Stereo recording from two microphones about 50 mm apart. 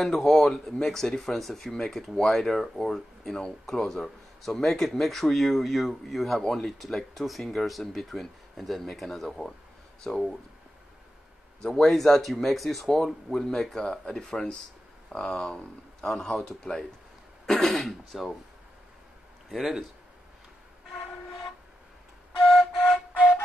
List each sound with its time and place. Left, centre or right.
0.0 s speech: centre
11.6 s speech: centre
19.5 s speech: centre
22.4 s flute: centre